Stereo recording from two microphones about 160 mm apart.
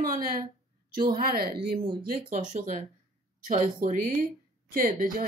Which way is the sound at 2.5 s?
45° right (ahead or behind).